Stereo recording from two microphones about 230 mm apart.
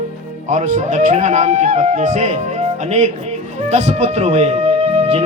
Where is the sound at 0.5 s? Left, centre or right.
Right.